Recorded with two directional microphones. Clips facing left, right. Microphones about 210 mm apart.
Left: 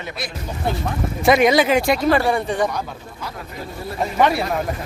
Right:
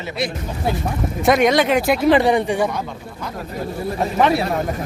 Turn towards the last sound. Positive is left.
turn(degrees=0)  # may be behind; listen again after turning